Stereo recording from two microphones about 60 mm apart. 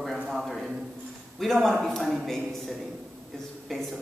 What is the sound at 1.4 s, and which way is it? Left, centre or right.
A man's voice, centre.